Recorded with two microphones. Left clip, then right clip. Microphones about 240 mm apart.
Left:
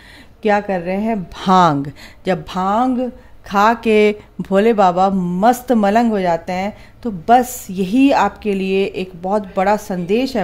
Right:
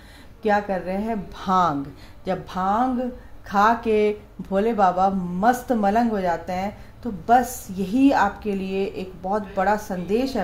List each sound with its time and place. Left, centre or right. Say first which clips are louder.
0.4 s speech: left 5 dB; left